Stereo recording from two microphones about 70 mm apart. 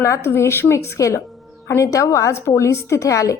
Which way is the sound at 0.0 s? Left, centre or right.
Left.